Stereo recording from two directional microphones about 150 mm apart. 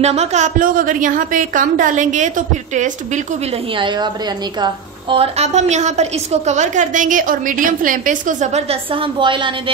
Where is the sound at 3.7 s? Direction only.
30° right (ahead or behind).